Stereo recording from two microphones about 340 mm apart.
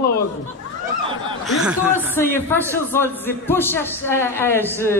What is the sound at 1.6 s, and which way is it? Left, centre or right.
Speech, centre.